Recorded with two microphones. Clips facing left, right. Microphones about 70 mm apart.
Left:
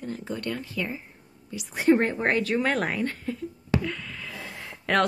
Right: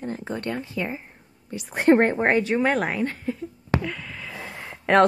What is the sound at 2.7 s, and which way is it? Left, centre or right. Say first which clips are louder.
Speech: right 3 dB; centre.